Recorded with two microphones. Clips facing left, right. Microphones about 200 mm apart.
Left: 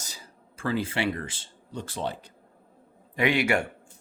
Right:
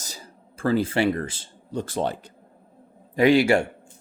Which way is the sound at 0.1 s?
40° right (ahead or behind).